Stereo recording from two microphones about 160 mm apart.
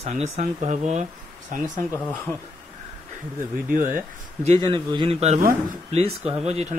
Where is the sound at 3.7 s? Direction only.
60° right (ahead or behind).